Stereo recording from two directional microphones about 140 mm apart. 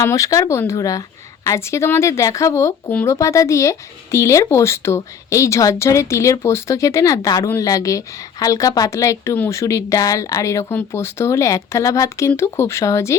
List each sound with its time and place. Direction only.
0.0 s speech: 20° left (ahead or behind)